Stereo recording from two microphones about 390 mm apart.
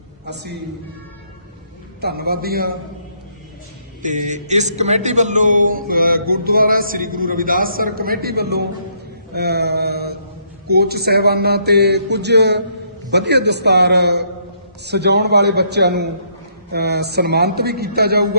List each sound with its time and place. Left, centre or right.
2.0 s a man's voice: right
4.0 s a man's voice: centre